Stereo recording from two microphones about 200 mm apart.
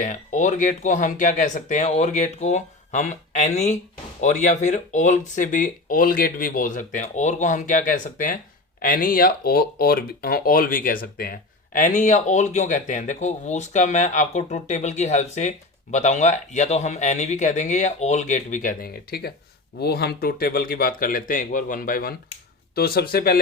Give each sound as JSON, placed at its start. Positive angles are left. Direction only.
{"t": 0.0, "sound": "speech", "side_deg": 40}